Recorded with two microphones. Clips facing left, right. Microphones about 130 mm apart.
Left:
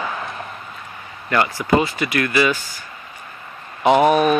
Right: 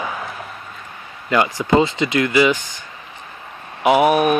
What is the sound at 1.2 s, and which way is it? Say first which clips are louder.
Speech: right 2 dB; 20° right (ahead or behind).